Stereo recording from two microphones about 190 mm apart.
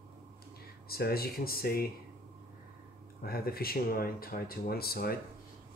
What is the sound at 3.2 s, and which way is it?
Speech, 55° left (ahead or behind).